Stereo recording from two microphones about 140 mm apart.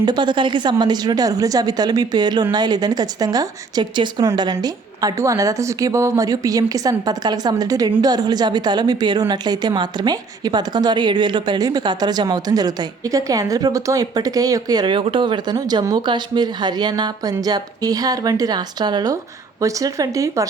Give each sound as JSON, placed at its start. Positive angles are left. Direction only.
{"t": 0.0, "sound": "a woman's voice", "side_deg": -30}